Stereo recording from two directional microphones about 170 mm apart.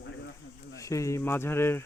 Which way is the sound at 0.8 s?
20° left (ahead or behind).